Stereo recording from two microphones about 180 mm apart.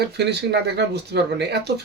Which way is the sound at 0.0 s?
65° right (ahead or behind).